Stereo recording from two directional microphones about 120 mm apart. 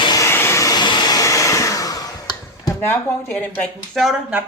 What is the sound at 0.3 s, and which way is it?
Vehicle, 20° left (ahead or behind).